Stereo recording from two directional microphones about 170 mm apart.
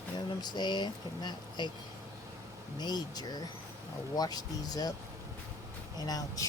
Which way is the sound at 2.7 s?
25° left (ahead or behind).